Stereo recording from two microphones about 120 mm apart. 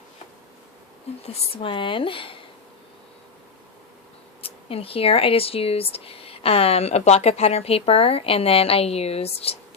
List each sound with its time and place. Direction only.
1.3 s speech: 45° left (ahead or behind)
4.4 s speech: 55° left (ahead or behind)